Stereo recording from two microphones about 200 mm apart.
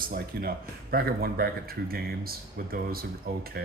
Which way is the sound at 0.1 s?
50° right (ahead or behind).